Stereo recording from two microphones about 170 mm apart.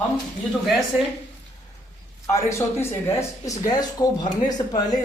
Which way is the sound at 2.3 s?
15° left (ahead or behind).